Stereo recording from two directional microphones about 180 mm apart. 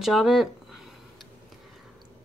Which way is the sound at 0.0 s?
Centre (ahead or behind).